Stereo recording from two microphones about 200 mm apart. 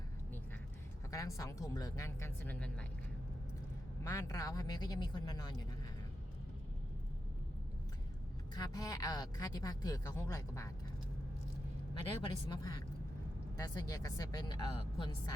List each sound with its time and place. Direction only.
1.1 s speech: 15° left (ahead or behind)
4.0 s a man's voice: 15° left (ahead or behind)
8.5 s speech: 20° left (ahead or behind)
12.2 s a man's voice: 20° left (ahead or behind)